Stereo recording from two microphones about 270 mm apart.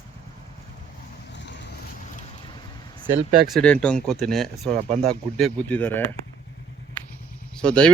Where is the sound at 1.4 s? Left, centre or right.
Left.